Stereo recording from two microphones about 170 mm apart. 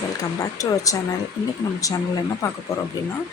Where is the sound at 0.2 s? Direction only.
20° left (ahead or behind).